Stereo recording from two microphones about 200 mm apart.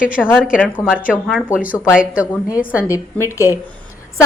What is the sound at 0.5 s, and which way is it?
A woman's voice, 5° left (ahead or behind).